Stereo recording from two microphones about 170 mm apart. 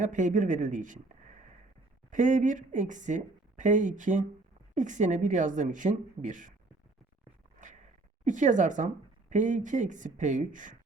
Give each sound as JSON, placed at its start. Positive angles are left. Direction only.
{"t": 0.0, "sound": "a woman's voice", "side_deg": -50}
{"t": 7.6, "sound": "a sound", "side_deg": -45}
{"t": 9.3, "sound": "a woman's voice", "side_deg": -45}